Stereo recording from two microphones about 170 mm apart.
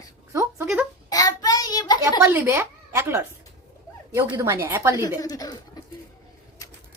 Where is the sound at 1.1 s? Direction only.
20° left (ahead or behind).